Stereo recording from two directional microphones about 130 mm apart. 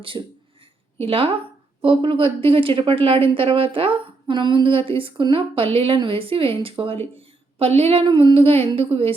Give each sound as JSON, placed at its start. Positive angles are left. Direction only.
{"t": 0.1, "sound": "speech", "side_deg": -35}
{"t": 0.9, "sound": "a woman's voice", "side_deg": -45}